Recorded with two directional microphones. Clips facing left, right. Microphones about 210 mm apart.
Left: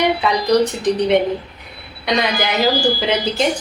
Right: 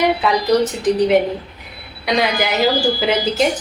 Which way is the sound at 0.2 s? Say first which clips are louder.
Even; centre (ahead or behind).